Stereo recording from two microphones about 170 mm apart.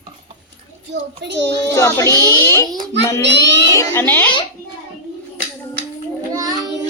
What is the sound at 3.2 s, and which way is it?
Speech, 90° right.